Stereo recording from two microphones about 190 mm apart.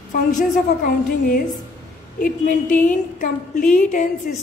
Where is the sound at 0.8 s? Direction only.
45° left (ahead or behind).